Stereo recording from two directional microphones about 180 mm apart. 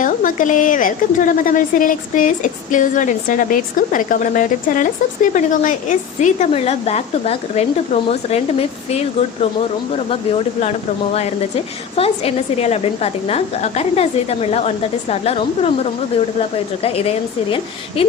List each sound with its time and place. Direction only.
0.0 s a woman's voice: 45° left (ahead or behind)